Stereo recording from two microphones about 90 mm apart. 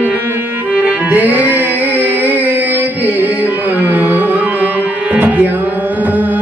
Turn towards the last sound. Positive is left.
turn(degrees=-20)  # may be behind; listen again after turning